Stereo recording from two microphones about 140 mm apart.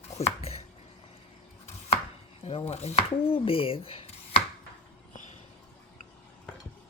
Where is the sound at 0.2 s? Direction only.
50° left (ahead or behind).